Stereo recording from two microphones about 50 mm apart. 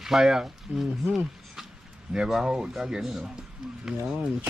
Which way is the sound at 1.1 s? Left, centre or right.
Centre.